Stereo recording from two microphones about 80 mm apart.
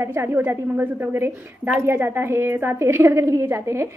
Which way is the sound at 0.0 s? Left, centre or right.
Right.